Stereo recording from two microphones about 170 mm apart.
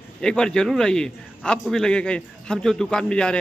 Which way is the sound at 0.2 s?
5° left (ahead or behind).